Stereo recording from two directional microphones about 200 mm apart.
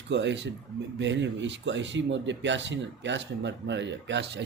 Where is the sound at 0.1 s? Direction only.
60° right (ahead or behind).